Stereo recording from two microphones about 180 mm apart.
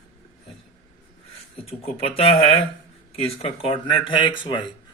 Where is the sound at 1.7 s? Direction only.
35° left (ahead or behind).